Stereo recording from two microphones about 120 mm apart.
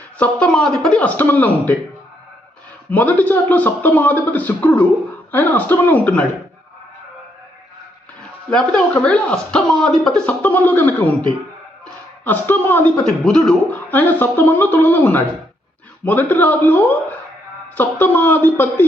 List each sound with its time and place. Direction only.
0.2 s speech: 5° left (ahead or behind)
2.9 s speech: 15° left (ahead or behind)
8.4 s speech: 10° left (ahead or behind)
12.2 s speech: 15° left (ahead or behind)
13.2 s a man's voice: 5° left (ahead or behind)
13.9 s speech: 15° left (ahead or behind)